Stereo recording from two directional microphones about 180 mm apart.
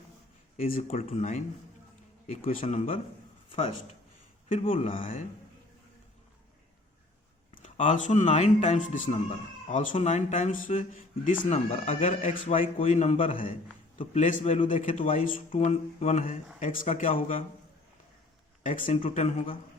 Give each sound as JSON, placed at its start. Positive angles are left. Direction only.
{"t": 0.5, "sound": "speech", "side_deg": 40}
{"t": 4.7, "sound": "speech", "side_deg": 45}
{"t": 7.5, "sound": "speech", "side_deg": 45}
{"t": 11.4, "sound": "speech", "side_deg": 35}
{"t": 14.8, "sound": "speech", "side_deg": 45}
{"t": 18.6, "sound": "speech", "side_deg": 45}